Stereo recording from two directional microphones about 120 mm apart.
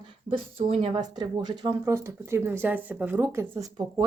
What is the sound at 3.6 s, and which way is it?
Speech, 30° right (ahead or behind).